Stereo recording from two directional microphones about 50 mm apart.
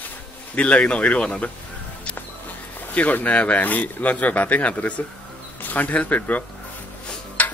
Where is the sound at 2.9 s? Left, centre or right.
Left.